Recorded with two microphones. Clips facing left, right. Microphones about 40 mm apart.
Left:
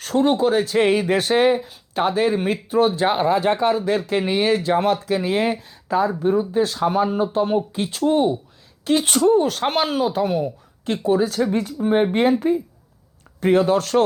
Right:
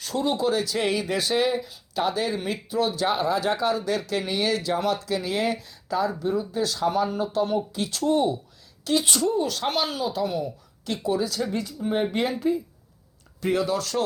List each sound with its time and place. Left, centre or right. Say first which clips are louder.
0.0 s speech: left 7 dB; left